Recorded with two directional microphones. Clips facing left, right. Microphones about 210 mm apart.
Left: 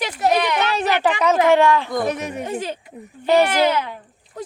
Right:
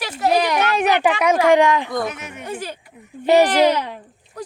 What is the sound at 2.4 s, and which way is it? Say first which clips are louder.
Speech: left 3 dB; 20° left (ahead or behind).